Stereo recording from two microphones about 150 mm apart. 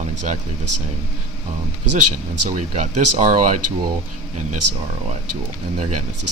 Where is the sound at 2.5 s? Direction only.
55° right (ahead or behind).